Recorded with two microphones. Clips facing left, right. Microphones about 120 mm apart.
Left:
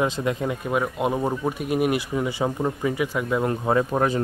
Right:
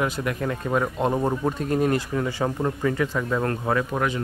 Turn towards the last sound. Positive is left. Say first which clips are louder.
# left 3 dB
turn(degrees=35)  # may be behind; listen again after turning